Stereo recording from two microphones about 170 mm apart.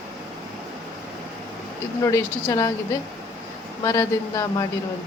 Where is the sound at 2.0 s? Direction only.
20° left (ahead or behind).